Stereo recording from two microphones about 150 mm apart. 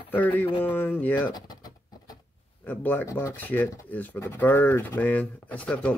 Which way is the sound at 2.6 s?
10° left (ahead or behind).